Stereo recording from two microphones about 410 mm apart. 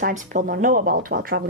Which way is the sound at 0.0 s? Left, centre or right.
Centre.